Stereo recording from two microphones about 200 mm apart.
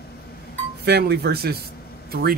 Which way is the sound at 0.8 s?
55° right (ahead or behind).